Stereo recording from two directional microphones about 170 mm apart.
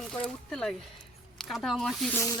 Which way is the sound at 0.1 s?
5° left (ahead or behind).